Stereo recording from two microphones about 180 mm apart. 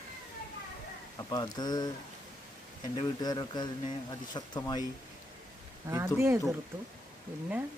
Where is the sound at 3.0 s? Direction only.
25° left (ahead or behind).